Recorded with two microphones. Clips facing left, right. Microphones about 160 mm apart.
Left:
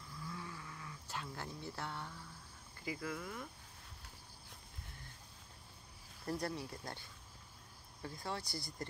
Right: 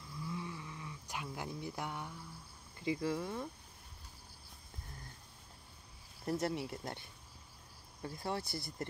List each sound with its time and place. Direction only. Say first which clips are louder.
0.2 s a sound: right 5 dB; 20° right (ahead or behind)
2.8 s speech: right 7 dB; 25° right (ahead or behind)
6.2 s speech: right 4 dB; 20° right (ahead or behind)